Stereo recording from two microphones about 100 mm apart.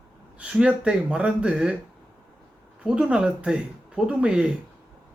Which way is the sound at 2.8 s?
10° right (ahead or behind).